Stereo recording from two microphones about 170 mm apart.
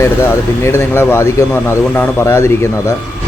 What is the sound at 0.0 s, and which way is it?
Speech, 15° left (ahead or behind).